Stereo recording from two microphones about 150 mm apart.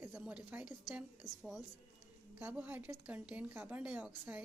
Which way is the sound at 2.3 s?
10° right (ahead or behind).